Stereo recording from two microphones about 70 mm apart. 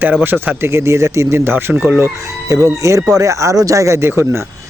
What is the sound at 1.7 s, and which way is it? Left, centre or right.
Chicken, centre.